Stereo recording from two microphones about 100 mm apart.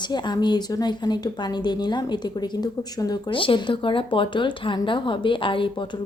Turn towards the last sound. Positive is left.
turn(degrees=55)  # may be behind; listen again after turning